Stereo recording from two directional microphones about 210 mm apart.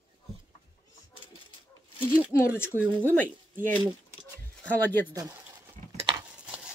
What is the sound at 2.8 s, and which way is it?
Speech, 10° right (ahead or behind).